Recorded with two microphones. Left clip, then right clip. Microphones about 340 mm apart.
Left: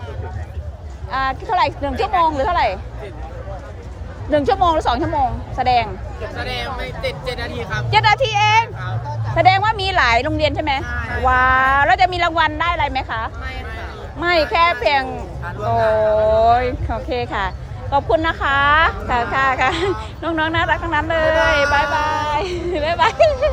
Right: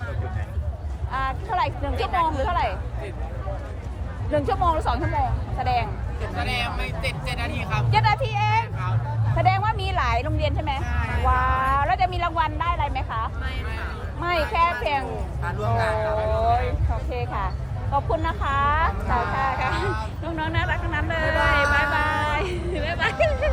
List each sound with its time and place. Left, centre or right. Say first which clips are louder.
1.1 s speech: left 7 dB; left
4.3 s speech: left 7 dB; left
6.4 s speech: left 2 dB; right
7.9 s speech: left 8 dB; left
15.4 s speech: left 7 dB; right
16.4 s speech: left 8 dB; left